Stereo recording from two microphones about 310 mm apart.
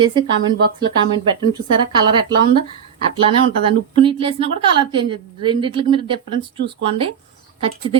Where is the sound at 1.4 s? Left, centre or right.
Centre.